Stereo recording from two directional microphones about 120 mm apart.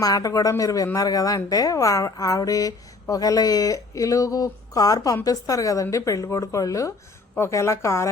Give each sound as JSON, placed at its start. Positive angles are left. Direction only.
{"t": 0.0, "sound": "speech", "side_deg": 30}